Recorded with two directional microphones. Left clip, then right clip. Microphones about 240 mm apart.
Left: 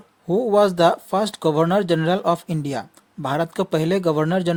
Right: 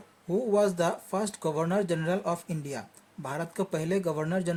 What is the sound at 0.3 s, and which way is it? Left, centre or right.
Speech, left.